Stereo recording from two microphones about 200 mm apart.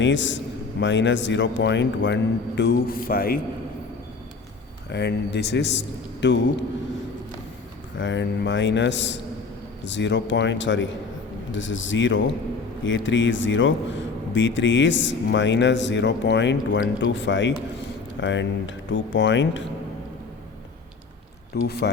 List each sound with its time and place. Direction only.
0.0 s speech: 65° left (ahead or behind); by 3.4 s 45° left (ahead or behind)
4.9 s speech: 60° left (ahead or behind)
7.9 s speech: 65° left (ahead or behind)
21.5 s speech: 55° left (ahead or behind)